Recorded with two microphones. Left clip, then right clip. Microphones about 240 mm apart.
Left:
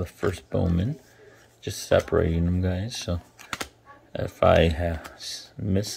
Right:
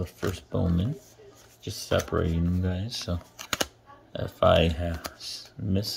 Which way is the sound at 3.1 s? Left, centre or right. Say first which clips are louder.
Left 3 dB; left.